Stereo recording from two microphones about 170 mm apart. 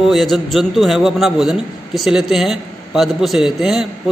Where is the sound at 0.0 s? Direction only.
Centre (ahead or behind).